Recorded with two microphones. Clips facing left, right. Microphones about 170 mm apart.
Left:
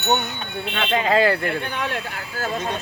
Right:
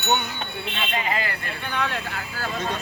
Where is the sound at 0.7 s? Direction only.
90° left.